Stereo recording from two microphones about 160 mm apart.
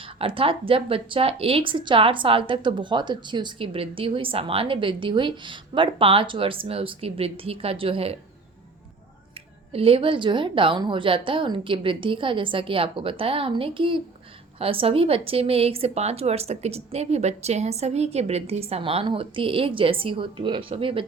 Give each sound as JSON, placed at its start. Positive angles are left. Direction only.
{"t": 0.0, "sound": "speech", "side_deg": -35}
{"t": 9.7, "sound": "speech", "side_deg": -35}